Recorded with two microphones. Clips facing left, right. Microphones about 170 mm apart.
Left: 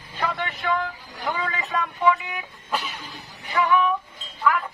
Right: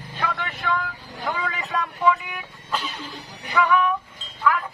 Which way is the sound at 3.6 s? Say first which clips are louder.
Left 1 dB; 20° left (ahead or behind).